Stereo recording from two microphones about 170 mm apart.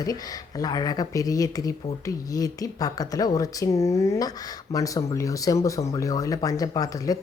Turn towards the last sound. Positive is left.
turn(degrees=20)  # may be behind; listen again after turning